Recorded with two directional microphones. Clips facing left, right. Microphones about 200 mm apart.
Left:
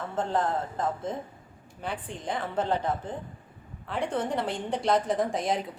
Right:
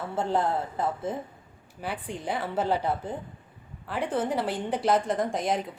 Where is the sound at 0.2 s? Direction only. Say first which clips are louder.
Right 1 dB; 10° right (ahead or behind).